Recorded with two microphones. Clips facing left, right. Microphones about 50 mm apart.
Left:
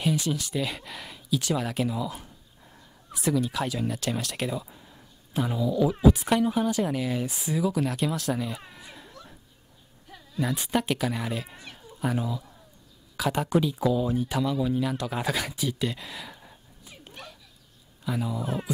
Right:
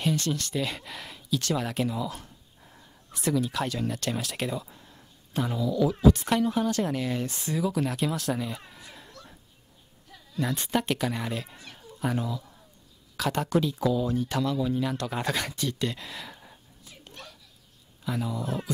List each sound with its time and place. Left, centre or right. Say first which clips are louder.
0.0 s speech: left 1 dB; centre
9.1 s children playing: left 1 dB; centre
10.3 s speech: left 1 dB; centre
11.7 s cat: left 1 dB; centre
13.1 s speech: left 1 dB; centre
16.8 s a sound: left 2 dB; centre
18.0 s speech: left 1 dB; centre